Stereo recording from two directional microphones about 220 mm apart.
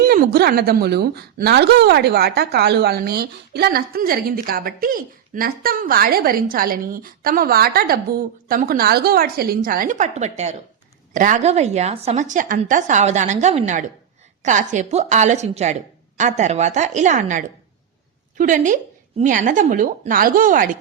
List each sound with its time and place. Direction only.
0.0 s a woman's voice: 45° right (ahead or behind)